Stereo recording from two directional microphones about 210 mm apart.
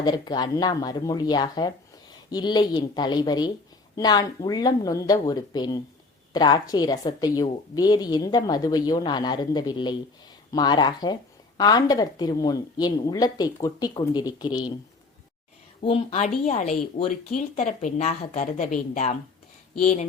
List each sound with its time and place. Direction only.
0.0 s a woman's voice: 20° left (ahead or behind)
15.8 s speech: 25° left (ahead or behind)